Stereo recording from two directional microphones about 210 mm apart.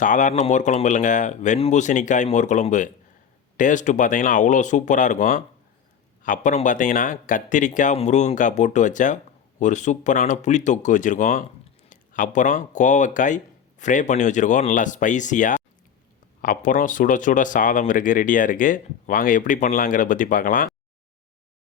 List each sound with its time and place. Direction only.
0.0 s speech: 35° left (ahead or behind)